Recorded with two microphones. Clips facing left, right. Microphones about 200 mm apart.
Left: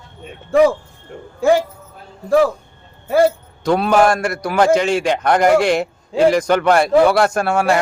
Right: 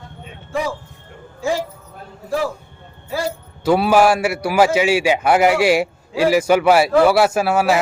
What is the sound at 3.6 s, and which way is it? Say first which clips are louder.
A man's voice: even; 5° right (ahead or behind).